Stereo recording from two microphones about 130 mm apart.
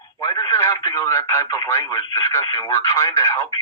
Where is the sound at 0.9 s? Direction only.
20° left (ahead or behind).